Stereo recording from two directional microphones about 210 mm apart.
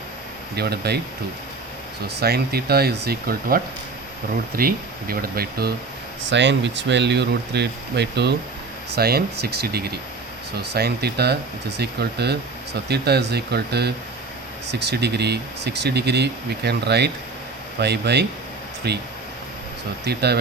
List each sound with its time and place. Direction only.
0.5 s speech: 50° right (ahead or behind)
2.0 s speech: 50° right (ahead or behind)
20.1 s speech: 50° right (ahead or behind)